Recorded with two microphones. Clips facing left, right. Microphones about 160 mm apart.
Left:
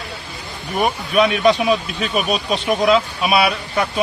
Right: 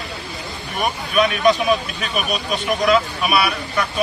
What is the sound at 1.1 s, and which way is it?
Speech, 25° left (ahead or behind).